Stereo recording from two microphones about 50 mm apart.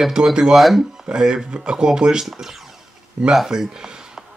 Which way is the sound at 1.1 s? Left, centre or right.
Centre.